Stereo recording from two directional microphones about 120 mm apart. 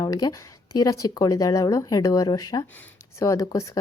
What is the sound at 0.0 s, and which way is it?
A woman's voice, 35° left (ahead or behind).